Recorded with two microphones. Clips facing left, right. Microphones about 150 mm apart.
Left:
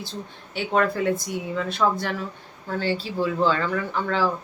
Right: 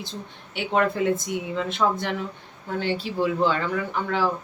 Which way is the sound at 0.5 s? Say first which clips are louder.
Even; 15° right (ahead or behind).